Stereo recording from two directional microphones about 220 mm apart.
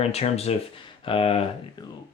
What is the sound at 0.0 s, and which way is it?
Speech, 30° left (ahead or behind).